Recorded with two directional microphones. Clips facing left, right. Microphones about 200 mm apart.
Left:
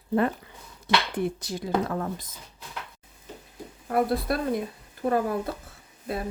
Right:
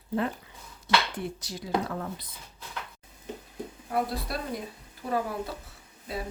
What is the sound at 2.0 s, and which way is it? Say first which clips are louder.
Speech: left 5 dB; 45° left (ahead or behind).